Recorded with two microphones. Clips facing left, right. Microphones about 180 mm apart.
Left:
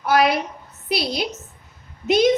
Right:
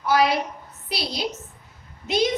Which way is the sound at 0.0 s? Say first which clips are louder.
Left 2 dB; 55° left (ahead or behind).